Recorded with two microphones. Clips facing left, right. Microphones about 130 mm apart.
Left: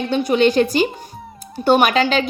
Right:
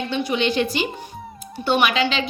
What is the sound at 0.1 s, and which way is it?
A woman's voice, 40° left (ahead or behind).